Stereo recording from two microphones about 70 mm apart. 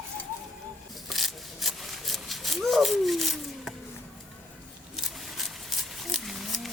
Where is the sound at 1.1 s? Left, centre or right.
Centre.